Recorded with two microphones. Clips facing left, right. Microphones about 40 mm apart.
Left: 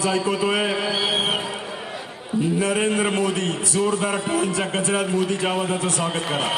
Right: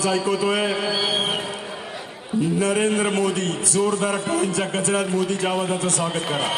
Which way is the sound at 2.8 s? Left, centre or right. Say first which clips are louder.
Even; centre.